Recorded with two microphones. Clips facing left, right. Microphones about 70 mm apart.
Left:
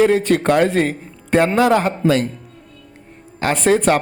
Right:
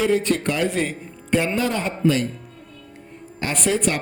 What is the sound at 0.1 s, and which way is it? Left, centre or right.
Speech, left.